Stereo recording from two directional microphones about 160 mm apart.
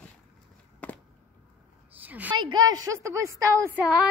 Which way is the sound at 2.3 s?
25° right (ahead or behind).